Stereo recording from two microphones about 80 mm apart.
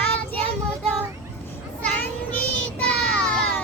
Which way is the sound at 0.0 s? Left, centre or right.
Centre.